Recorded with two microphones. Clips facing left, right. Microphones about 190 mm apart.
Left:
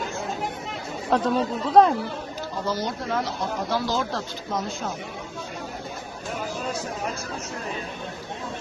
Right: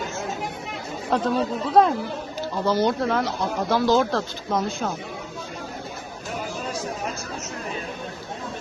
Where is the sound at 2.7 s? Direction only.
65° right (ahead or behind).